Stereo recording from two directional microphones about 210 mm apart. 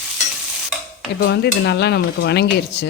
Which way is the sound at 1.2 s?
50° left (ahead or behind).